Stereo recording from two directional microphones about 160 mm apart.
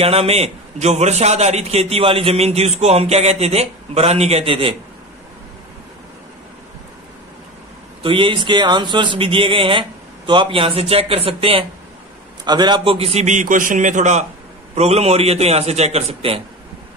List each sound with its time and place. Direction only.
0.0 s a man's voice: 40° right (ahead or behind)
8.0 s a man's voice: 30° right (ahead or behind)